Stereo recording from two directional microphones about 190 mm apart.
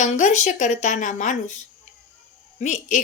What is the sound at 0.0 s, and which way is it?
A woman's voice, 40° left (ahead or behind).